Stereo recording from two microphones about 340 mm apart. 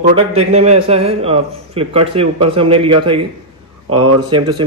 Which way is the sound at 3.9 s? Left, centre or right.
Right.